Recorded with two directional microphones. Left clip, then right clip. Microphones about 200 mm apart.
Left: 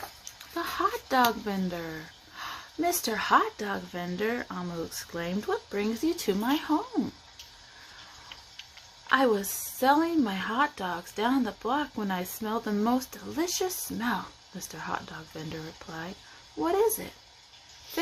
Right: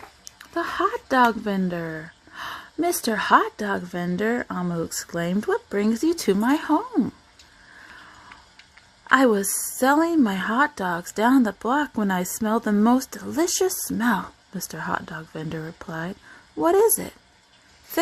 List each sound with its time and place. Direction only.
0.5 s speech: 40° right (ahead or behind)
9.0 s speech: 45° right (ahead or behind)